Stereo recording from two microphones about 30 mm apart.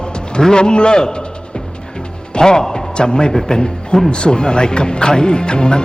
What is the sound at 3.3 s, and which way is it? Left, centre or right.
Speech, centre.